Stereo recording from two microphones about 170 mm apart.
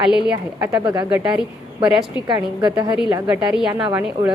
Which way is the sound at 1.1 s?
5° right (ahead or behind).